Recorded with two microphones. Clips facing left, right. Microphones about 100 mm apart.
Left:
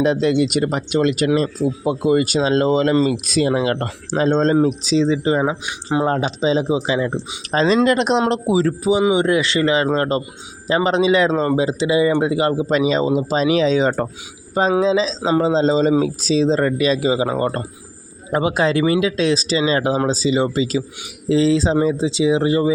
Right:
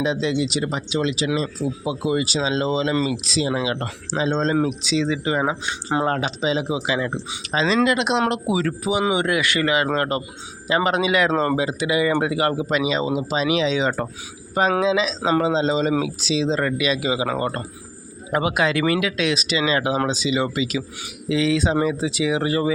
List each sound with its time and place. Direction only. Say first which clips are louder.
0.0 s speech: left 5 dB; 55° left (ahead or behind); by 5.4 s 35° left (ahead or behind)
5.4 s speech: left 2 dB; 15° left (ahead or behind)
6.1 s speech: left 4 dB; 30° left (ahead or behind)
12.7 s speech: left 5 dB; 40° left (ahead or behind); by 22.7 s 20° left (ahead or behind)